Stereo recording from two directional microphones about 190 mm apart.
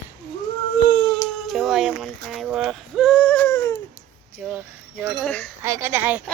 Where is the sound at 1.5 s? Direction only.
Centre (ahead or behind); by 3.8 s 15° left (ahead or behind).